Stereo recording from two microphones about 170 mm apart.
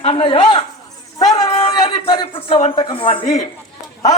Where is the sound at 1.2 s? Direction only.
20° left (ahead or behind); by 2.7 s 35° left (ahead or behind).